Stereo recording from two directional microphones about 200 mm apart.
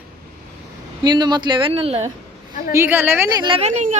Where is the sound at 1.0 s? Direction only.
20° right (ahead or behind).